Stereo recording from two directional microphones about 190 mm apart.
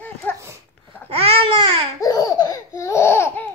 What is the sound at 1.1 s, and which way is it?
Babbling, 30° right (ahead or behind).